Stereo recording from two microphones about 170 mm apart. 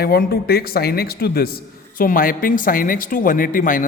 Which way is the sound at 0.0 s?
65° left (ahead or behind).